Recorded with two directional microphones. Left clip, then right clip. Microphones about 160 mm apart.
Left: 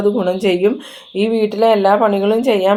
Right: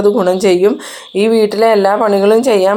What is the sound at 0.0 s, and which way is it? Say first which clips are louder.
Speech: right 5 dB; 30° right (ahead or behind).